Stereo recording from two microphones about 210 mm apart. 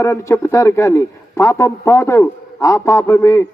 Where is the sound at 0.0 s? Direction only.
15° left (ahead or behind).